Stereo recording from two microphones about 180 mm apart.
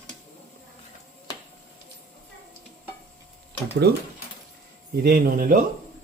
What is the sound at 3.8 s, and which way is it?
Speech, 65° right (ahead or behind).